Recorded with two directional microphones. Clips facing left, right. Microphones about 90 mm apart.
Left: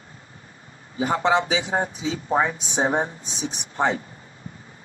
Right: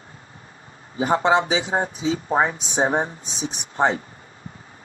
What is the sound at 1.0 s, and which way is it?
Speech, 30° right (ahead or behind).